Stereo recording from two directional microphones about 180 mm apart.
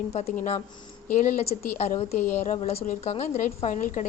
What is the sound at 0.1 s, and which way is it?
Speech, 40° left (ahead or behind).